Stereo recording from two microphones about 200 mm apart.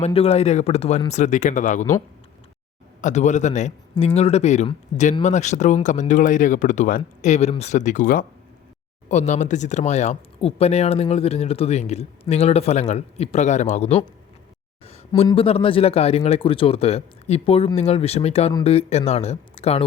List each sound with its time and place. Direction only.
0.0 s speech: 30° left (ahead or behind)
3.0 s speech: 35° left (ahead or behind)